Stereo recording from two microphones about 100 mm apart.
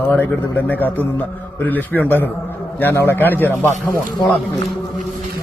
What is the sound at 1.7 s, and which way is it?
A man's voice, 15° left (ahead or behind).